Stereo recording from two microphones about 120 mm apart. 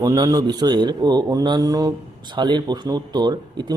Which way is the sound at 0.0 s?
30° right (ahead or behind).